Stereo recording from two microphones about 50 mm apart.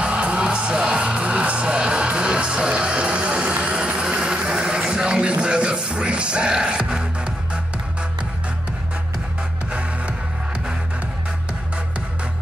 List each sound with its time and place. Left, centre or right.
0.0 s music: right
9.7 s music: right